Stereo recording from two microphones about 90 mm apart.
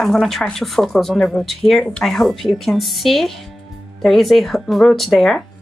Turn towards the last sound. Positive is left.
turn(degrees=5)  # may be behind; listen again after turning